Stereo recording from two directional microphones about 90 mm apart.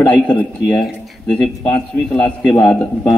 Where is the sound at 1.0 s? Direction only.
10° left (ahead or behind).